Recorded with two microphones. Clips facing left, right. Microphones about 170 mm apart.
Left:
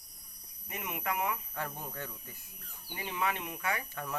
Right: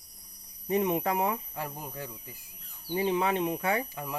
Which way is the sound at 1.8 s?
15° right (ahead or behind).